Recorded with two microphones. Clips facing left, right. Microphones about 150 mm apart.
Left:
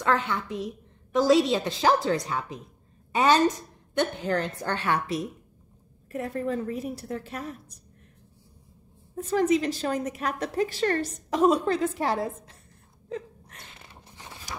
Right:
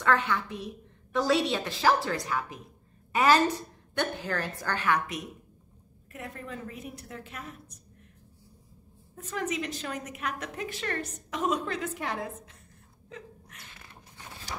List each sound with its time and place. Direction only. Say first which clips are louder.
0.0 s a woman's voice: left 1 dB; 25° left (ahead or behind)
9.1 s a woman's voice: left 10 dB; 35° left (ahead or behind)
13.1 s gasp: left 10 dB; 30° left (ahead or behind)
14.1 s a sound: left 1 dB; 15° left (ahead or behind)